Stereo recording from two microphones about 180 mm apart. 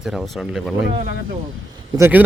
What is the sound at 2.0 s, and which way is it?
Speech, 10° right (ahead or behind).